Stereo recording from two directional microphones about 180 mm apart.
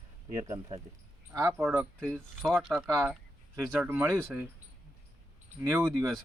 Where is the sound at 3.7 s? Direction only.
10° right (ahead or behind).